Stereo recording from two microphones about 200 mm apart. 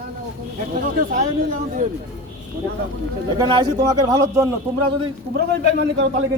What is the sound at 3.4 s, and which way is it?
Speech, 20° right (ahead or behind).